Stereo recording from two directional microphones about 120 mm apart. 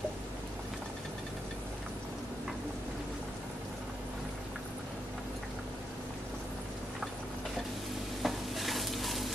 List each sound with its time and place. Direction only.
8.2 s stir: centre (ahead or behind)